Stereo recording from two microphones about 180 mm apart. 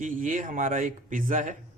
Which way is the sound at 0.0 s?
45° right (ahead or behind).